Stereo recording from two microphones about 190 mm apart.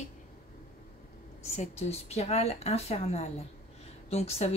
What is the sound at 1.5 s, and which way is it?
Speech, 35° left (ahead or behind).